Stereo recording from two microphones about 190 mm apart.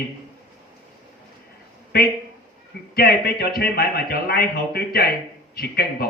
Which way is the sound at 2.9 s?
55° left (ahead or behind).